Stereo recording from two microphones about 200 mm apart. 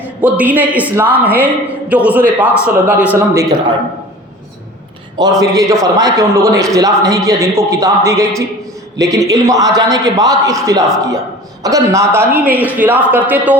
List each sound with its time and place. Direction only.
0.2 s a man's voice: 5° right (ahead or behind)
5.4 s a man's voice: 15° right (ahead or behind)